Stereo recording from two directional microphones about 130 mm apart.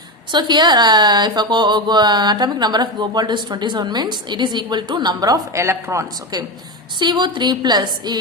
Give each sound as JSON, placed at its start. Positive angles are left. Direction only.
{"t": 0.3, "sound": "speech", "side_deg": -35}
{"t": 7.0, "sound": "speech", "side_deg": -35}